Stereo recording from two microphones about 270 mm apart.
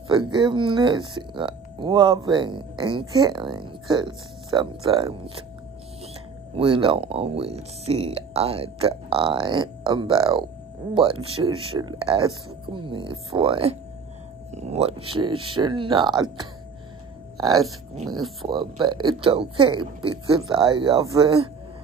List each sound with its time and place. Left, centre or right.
0.1 s speech: centre
6.5 s speech: centre